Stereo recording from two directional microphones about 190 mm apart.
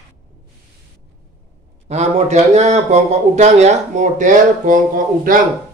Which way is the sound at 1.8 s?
35° right (ahead or behind).